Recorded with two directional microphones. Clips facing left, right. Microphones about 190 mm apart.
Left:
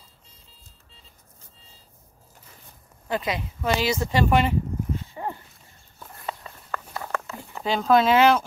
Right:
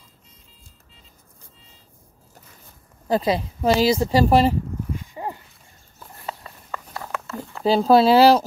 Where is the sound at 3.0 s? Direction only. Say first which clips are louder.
Right 7 dB; 35° right (ahead or behind).